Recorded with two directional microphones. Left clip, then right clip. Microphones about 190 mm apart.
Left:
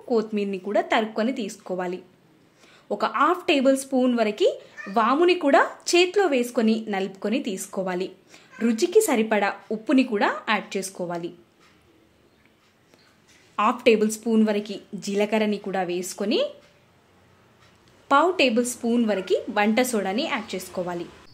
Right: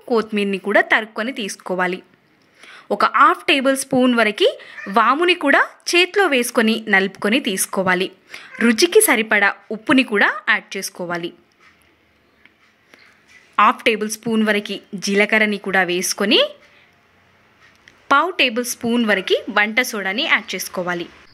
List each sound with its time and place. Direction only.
0.1 s speech: 10° right (ahead or behind)
13.6 s a woman's voice: 5° right (ahead or behind)
18.0 s a woman's voice: 10° right (ahead or behind)